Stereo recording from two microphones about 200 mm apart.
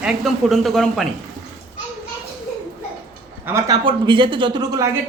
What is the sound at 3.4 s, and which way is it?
Speech, 15° right (ahead or behind).